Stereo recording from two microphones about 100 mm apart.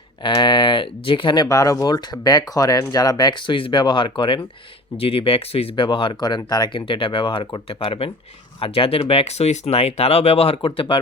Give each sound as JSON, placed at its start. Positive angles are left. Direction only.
{"t": 0.2, "sound": "speech", "side_deg": 50}
{"t": 1.5, "sound": "speech", "side_deg": 35}
{"t": 4.9, "sound": "speech", "side_deg": 70}
{"t": 6.8, "sound": "speech", "side_deg": 60}
{"t": 10.8, "sound": "speech", "side_deg": 55}